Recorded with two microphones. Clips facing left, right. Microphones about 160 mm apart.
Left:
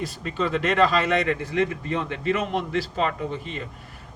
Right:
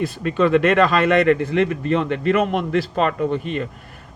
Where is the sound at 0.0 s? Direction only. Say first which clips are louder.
Right 8 dB; 60° right (ahead or behind).